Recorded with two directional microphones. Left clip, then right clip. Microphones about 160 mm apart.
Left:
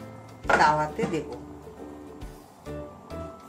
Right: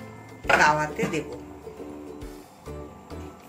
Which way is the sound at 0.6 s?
30° left (ahead or behind).